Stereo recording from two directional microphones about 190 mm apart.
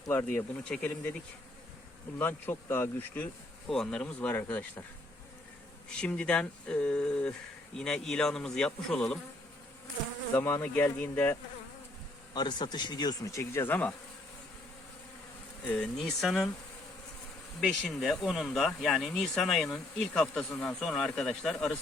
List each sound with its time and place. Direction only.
0.1 s speech: 10° left (ahead or behind)
2.1 s speech: 10° left (ahead or behind)
6.0 s speech: 5° left (ahead or behind)
10.3 s speech: 10° left (ahead or behind)
12.3 s insect: 20° left (ahead or behind)
15.6 s speech: 5° left (ahead or behind)
17.6 s speech: centre (ahead or behind)